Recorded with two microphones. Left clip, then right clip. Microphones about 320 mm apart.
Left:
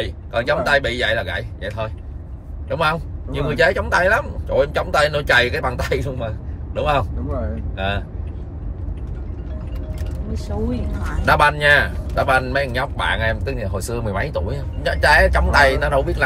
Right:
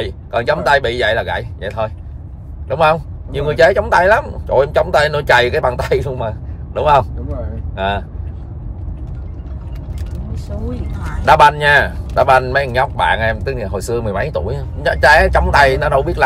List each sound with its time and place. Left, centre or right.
0.0 s speech: centre
11.2 s speech: centre